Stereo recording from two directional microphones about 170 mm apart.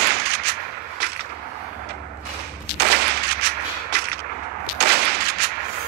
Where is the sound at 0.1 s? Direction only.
70° right (ahead or behind).